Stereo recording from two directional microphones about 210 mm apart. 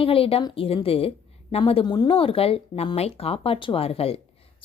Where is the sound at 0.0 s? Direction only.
25° left (ahead or behind).